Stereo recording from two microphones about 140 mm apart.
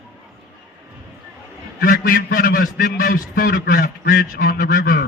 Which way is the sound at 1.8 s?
90° left.